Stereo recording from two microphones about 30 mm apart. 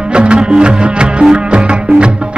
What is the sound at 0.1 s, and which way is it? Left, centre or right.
Music, right.